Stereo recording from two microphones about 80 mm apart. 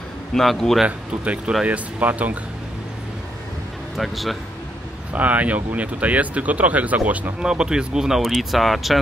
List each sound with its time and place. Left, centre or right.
0.3 s a man's voice: centre
0.8 s speech: centre
3.9 s a man's voice: centre
5.1 s speech: centre